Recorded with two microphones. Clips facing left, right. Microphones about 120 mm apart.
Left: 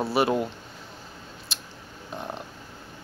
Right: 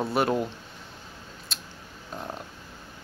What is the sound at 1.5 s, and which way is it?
Scissors, centre (ahead or behind).